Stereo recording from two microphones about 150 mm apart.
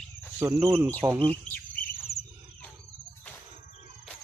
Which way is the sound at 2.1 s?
90° left.